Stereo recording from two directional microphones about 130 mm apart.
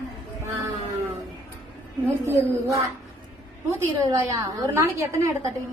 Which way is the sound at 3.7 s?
25° right (ahead or behind).